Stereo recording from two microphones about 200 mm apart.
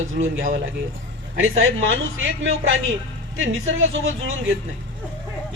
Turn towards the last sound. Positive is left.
turn(degrees=-75)  # may be behind; listen again after turning